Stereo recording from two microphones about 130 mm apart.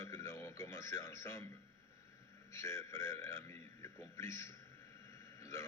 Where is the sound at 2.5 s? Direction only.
20° left (ahead or behind).